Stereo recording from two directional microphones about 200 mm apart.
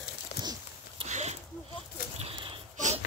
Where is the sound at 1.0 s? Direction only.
35° right (ahead or behind).